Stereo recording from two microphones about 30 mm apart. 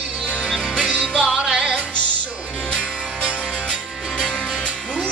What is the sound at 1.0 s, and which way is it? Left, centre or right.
Music, right.